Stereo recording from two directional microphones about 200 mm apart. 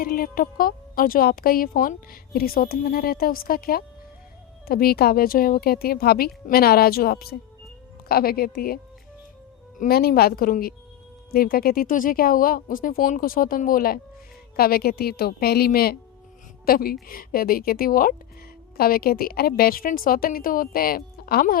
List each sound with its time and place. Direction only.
0.0 s speech: 45° left (ahead or behind)